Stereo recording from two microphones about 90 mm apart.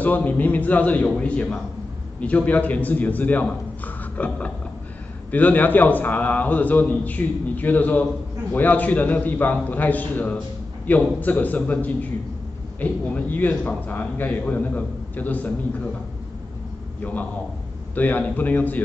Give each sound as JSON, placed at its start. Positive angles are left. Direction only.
{"t": 0.0, "sound": "a man's voice", "side_deg": 20}
{"t": 17.0, "sound": "a man's voice", "side_deg": 15}